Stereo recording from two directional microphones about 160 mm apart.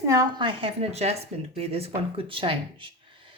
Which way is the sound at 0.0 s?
20° right (ahead or behind).